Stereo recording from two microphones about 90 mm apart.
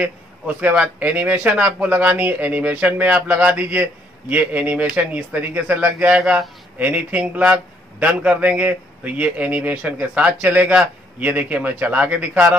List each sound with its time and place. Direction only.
0.0 s speech: 15° right (ahead or behind)